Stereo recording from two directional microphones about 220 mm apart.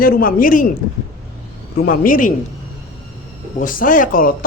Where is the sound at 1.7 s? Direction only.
40° left (ahead or behind).